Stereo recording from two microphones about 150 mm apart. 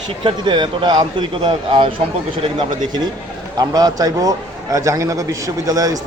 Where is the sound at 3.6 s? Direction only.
25° right (ahead or behind).